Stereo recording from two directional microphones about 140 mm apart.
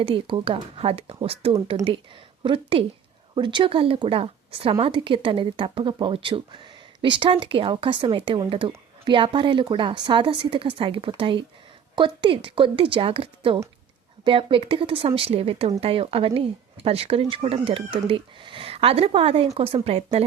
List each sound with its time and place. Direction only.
0.0 s speech: 40° right (ahead or behind)